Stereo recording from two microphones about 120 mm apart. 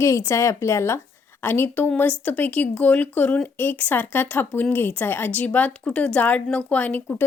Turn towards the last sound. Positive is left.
turn(degrees=15)  # may be behind; listen again after turning